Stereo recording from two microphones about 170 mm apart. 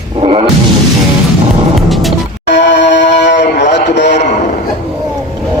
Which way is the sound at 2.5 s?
90° left.